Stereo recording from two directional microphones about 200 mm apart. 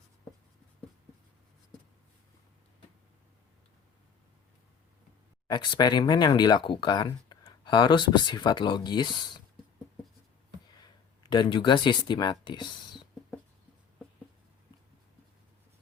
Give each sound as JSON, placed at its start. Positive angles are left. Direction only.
{"t": 5.5, "sound": "speech", "side_deg": 20}
{"t": 10.8, "sound": "speech", "side_deg": 20}